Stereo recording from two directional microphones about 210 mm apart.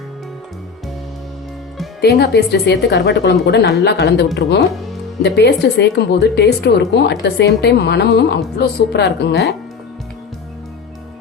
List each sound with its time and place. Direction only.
2.0 s a woman's voice: 50° left (ahead or behind)